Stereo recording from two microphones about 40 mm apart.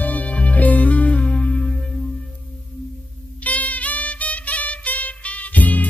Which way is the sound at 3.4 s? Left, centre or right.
Left.